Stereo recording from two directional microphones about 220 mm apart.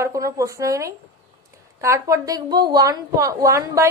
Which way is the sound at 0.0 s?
15° right (ahead or behind).